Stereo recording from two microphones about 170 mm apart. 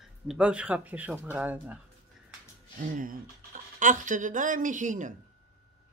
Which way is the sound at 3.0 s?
50° right (ahead or behind).